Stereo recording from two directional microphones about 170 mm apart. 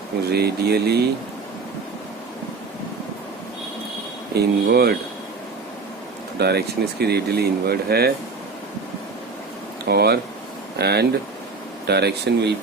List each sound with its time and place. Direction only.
0.3 s speech: 70° right (ahead or behind)
4.4 s speech: 70° right (ahead or behind)
6.4 s speech: 70° right (ahead or behind)
9.8 s speech: 70° right (ahead or behind); by 12.5 s 85° right